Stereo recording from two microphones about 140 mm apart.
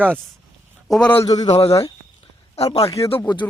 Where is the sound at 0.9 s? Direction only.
5° left (ahead or behind).